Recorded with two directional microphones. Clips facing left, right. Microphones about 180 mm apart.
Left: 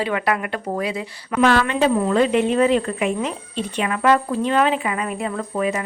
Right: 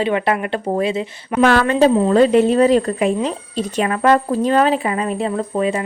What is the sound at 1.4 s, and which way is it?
A woman's voice, 45° right (ahead or behind).